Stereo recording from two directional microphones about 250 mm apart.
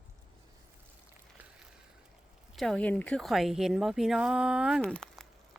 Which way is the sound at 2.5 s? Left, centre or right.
Centre.